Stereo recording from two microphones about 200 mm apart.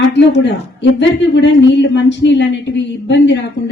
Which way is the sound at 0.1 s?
60° left (ahead or behind).